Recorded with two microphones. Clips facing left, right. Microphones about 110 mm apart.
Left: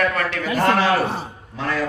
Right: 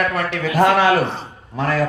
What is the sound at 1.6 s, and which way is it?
Speech, 50° right (ahead or behind).